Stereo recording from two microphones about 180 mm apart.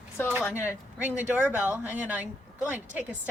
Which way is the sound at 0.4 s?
15° left (ahead or behind).